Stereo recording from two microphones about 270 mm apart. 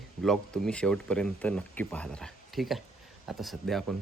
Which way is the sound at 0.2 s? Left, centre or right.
Centre.